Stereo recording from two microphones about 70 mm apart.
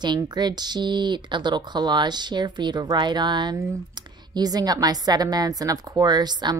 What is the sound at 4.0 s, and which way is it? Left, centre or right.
A woman's voice, right.